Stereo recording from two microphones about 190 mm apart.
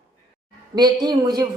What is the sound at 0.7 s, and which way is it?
Speech, 20° right (ahead or behind).